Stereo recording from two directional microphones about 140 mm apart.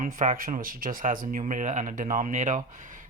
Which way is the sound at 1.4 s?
60° right (ahead or behind).